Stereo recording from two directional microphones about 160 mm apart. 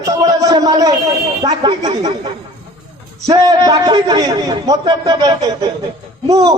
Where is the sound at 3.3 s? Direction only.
25° right (ahead or behind).